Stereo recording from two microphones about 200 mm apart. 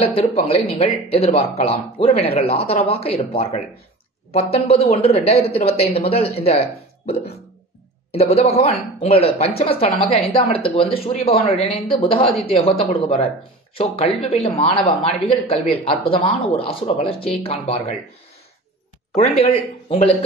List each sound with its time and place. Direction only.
0.0 s speech: 30° left (ahead or behind)
19.1 s speech: 30° left (ahead or behind)